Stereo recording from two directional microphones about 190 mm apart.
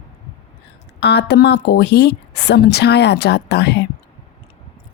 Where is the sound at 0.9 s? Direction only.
60° left (ahead or behind).